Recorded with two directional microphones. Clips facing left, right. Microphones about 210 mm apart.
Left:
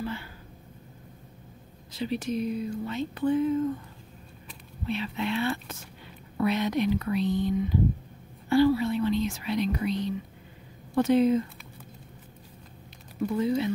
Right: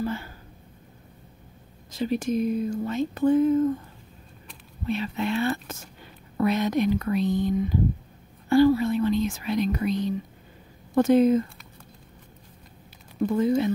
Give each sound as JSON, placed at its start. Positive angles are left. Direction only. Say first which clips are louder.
{"t": 0.0, "sound": "a sound", "louder": "right 5 dB", "side_deg": -45}
{"t": 1.9, "sound": "speech", "louder": "right 4 dB", "side_deg": -45}
{"t": 4.8, "sound": "speech", "louder": "right 3 dB", "side_deg": -45}
{"t": 13.4, "sound": "speech", "louder": "right 4 dB", "side_deg": -45}